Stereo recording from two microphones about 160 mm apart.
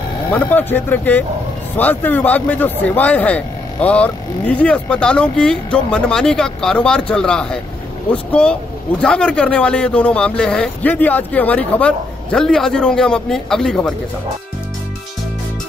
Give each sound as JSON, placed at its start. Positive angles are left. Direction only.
{"t": 0.3, "sound": "speech", "side_deg": 10}